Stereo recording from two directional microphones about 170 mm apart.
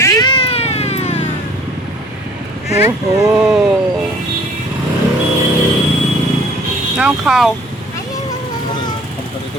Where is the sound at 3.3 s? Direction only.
5° right (ahead or behind).